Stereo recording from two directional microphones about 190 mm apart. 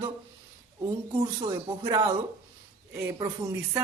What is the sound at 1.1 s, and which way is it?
Speech, 20° right (ahead or behind).